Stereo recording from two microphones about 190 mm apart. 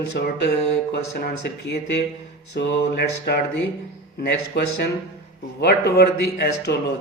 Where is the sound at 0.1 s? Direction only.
60° left (ahead or behind).